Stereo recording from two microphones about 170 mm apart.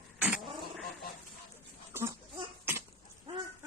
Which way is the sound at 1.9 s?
15° right (ahead or behind).